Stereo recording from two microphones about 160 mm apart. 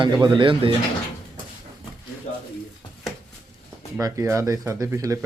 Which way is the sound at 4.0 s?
20° right (ahead or behind).